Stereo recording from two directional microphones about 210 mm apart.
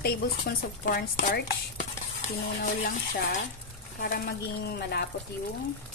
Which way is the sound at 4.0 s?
45° left (ahead or behind).